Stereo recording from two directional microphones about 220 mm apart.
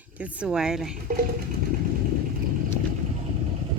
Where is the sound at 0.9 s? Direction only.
40° right (ahead or behind).